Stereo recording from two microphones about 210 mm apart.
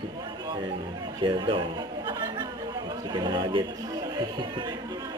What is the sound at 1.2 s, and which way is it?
Speech, 25° right (ahead or behind).